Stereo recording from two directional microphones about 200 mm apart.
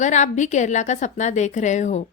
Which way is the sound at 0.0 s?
35° left (ahead or behind).